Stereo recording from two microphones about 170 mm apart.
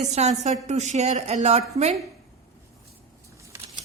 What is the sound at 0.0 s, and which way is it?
A woman's voice, 40° right (ahead or behind).